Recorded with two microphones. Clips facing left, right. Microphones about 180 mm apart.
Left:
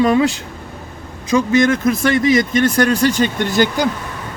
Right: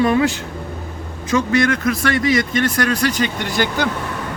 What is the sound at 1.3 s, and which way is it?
Speech, 20° left (ahead or behind).